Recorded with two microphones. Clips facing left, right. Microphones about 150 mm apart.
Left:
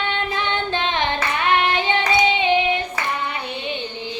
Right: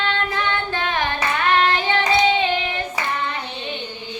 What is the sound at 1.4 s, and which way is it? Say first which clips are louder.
Child singing: right 1 dB; 20° left (ahead or behind).